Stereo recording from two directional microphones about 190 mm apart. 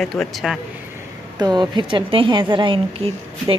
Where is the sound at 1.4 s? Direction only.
20° right (ahead or behind).